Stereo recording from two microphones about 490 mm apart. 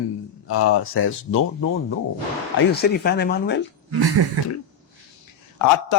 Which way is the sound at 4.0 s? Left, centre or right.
Right.